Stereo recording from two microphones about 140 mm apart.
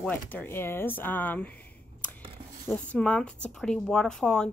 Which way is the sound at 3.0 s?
5° left (ahead or behind).